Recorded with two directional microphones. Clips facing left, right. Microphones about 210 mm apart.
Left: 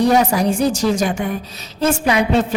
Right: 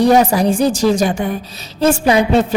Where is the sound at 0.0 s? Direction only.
30° right (ahead or behind).